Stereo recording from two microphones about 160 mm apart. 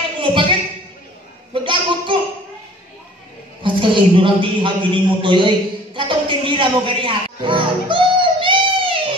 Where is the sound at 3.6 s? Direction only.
30° right (ahead or behind).